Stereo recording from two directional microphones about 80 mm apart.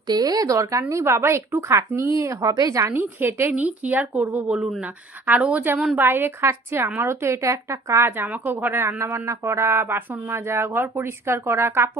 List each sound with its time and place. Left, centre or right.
0.1 s a woman's voice: right
2.9 s a woman's voice: right
6.0 s a woman's voice: right